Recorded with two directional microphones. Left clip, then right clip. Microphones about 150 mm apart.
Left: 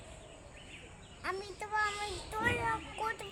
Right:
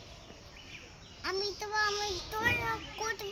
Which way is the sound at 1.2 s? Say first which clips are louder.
Right 4 dB; 20° left (ahead or behind).